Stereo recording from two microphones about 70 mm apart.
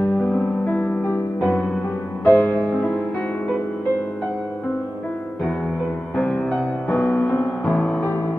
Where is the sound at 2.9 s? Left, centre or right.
Centre.